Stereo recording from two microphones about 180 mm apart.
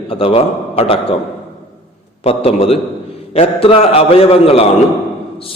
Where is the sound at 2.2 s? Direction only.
35° left (ahead or behind).